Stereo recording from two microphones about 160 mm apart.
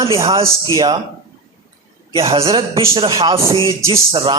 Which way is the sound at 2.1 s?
35° right (ahead or behind).